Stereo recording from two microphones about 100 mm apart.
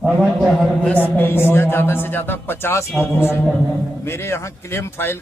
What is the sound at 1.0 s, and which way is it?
Speech, 20° left (ahead or behind).